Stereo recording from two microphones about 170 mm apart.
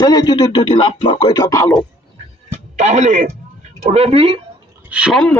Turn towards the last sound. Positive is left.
turn(degrees=0)  # may be behind; listen again after turning